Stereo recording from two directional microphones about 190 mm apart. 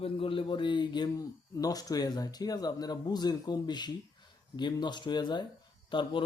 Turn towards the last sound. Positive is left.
turn(degrees=25)  # may be behind; listen again after turning